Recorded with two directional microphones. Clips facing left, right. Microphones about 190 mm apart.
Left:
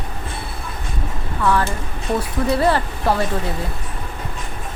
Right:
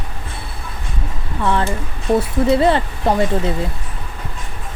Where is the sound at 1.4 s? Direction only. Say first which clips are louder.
Even; 25° right (ahead or behind).